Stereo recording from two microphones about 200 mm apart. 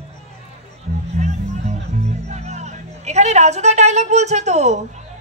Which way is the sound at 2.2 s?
35° right (ahead or behind).